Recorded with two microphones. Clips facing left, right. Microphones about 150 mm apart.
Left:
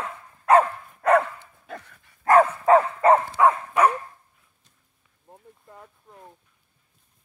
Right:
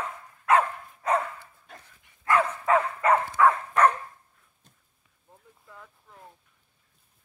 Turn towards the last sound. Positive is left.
turn(degrees=40)  # may be behind; listen again after turning